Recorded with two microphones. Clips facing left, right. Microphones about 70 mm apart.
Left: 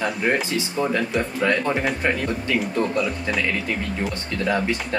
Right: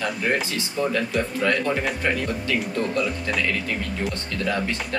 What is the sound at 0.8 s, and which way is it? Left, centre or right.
Speech, left.